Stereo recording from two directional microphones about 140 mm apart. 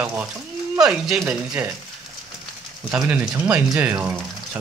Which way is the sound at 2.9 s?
10° right (ahead or behind).